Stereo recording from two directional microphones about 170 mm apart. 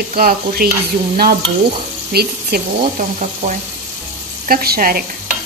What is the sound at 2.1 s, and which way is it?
Speech, 65° right (ahead or behind).